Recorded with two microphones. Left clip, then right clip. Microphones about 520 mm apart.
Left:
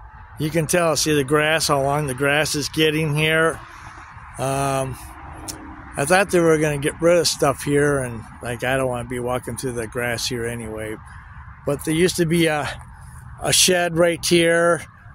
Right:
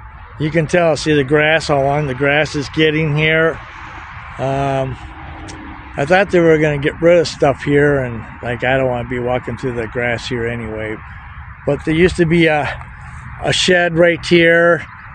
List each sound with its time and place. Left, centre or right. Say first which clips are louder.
0.4 s speech: right 5 dB; left